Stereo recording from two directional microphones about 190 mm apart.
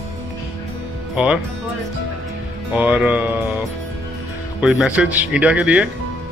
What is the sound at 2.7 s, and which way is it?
Speech, 5° right (ahead or behind).